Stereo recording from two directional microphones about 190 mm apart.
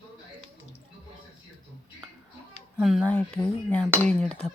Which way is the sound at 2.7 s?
Centre (ahead or behind).